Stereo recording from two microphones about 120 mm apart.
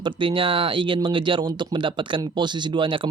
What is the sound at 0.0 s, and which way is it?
Speech, 45° right (ahead or behind).